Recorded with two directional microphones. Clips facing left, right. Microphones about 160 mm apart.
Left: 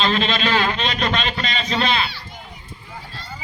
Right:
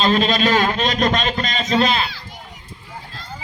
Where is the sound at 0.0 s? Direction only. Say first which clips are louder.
Right 4 dB; 40° right (ahead or behind).